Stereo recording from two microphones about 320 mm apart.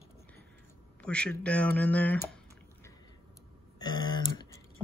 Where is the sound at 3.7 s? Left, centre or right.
Centre.